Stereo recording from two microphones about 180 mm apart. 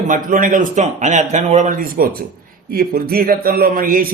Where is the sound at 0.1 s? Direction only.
45° right (ahead or behind).